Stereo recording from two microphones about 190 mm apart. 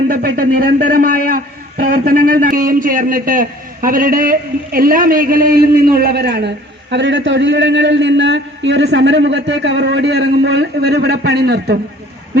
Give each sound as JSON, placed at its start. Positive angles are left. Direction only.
{"t": 0.1, "sound": "a man's voice", "side_deg": -50}
{"t": 6.9, "sound": "a man's voice", "side_deg": -70}